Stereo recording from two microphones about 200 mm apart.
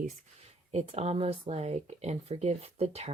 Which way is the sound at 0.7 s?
35° right (ahead or behind).